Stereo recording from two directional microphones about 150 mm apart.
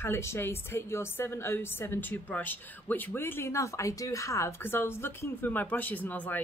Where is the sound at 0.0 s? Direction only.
15° left (ahead or behind).